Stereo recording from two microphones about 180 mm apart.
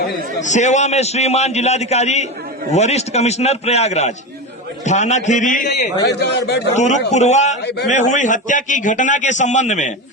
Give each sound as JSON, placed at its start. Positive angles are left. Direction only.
{"t": 0.4, "sound": "a man's voice", "side_deg": 40}
{"t": 5.6, "sound": "a man's voice", "side_deg": 65}
{"t": 6.7, "sound": "a man's voice", "side_deg": 40}